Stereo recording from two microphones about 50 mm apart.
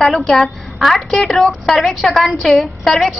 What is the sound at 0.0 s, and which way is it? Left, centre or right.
A woman's voice, centre.